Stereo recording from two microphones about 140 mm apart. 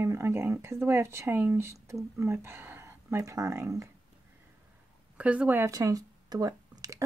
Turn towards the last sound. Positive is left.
turn(degrees=-25)  # may be behind; listen again after turning